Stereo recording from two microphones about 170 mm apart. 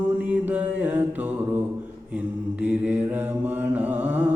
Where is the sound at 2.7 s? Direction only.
10° right (ahead or behind).